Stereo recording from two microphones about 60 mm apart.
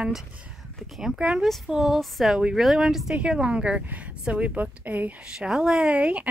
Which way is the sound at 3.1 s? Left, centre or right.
Centre.